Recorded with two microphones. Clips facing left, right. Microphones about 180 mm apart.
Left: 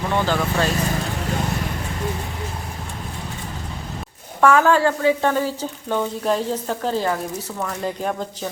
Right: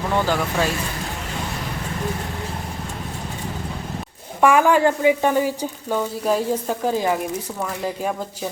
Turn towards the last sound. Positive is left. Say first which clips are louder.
# right 1 dB
turn(degrees=-15)  # may be behind; listen again after turning